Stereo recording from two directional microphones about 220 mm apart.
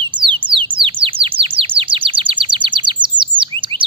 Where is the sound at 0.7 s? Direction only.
25° right (ahead or behind).